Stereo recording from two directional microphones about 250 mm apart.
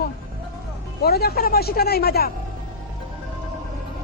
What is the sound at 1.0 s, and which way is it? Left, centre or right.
Speech, left.